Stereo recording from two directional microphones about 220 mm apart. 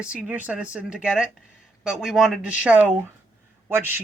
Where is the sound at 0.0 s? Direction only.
5° right (ahead or behind).